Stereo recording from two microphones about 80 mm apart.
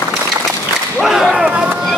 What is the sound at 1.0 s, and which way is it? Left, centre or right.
Speech, centre.